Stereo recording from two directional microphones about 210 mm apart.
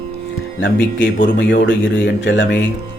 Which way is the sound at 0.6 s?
60° left (ahead or behind).